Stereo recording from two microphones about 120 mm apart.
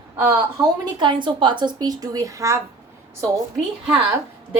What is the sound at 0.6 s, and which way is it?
A woman's voice, 40° right (ahead or behind).